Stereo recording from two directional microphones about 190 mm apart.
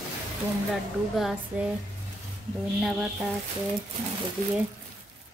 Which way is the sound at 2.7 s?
Centre (ahead or behind).